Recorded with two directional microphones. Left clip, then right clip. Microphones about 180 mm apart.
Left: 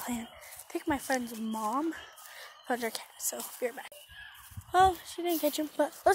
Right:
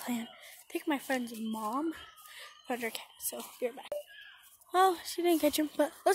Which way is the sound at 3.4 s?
15° right (ahead or behind).